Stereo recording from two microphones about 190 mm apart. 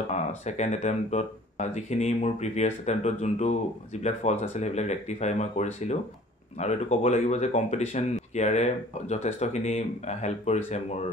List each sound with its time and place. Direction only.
0.5 s speech: 35° left (ahead or behind)